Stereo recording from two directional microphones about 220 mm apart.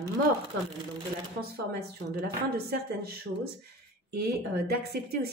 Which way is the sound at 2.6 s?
45° right (ahead or behind).